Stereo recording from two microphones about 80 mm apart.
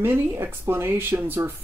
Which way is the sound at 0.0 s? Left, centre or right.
Right.